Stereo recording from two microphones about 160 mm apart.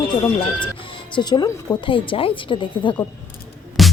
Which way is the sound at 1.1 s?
25° left (ahead or behind).